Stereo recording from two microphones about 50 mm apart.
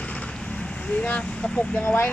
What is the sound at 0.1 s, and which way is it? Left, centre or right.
Vehicle, left.